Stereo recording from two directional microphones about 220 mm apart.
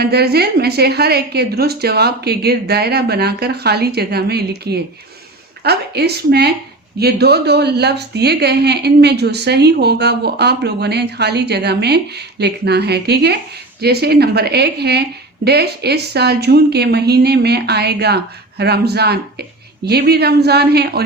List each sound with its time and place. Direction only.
0.0 s a woman's voice: 45° right (ahead or behind)